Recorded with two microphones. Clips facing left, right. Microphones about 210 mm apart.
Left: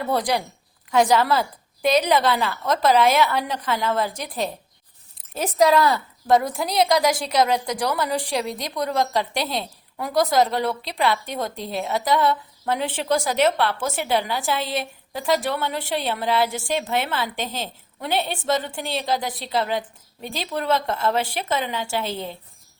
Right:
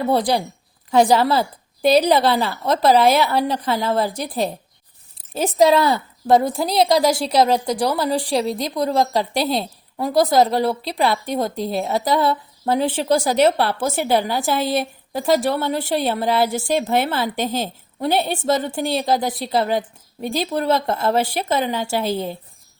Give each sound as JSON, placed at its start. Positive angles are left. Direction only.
{"t": 0.1, "sound": "a woman's voice", "side_deg": -30}